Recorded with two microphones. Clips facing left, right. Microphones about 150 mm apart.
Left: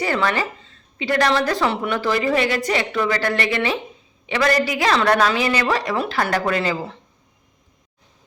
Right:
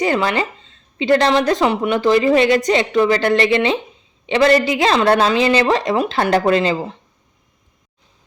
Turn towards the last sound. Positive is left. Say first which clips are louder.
# right 6 dB
turn(degrees=-25)  # may be behind; listen again after turning